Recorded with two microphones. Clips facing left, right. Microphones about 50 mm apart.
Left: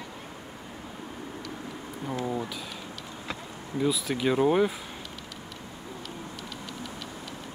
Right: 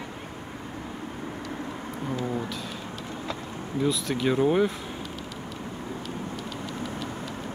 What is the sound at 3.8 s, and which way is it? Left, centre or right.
Speech, centre.